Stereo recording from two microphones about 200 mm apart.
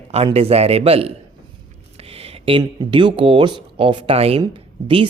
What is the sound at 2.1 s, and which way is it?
Speech, 30° right (ahead or behind).